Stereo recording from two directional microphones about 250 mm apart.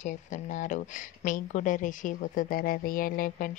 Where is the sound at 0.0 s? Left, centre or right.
Left.